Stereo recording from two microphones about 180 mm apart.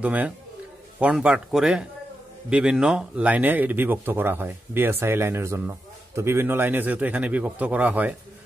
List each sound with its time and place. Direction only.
0.0 s a man's voice: 10° right (ahead or behind)